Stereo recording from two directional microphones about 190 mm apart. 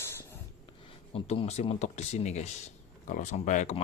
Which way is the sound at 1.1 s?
35° left (ahead or behind).